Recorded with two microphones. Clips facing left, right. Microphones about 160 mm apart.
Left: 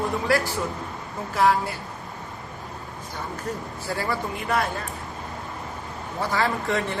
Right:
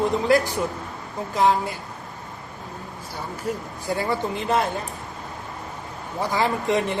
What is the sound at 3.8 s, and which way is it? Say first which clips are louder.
Speech: right 4 dB; 20° right (ahead or behind).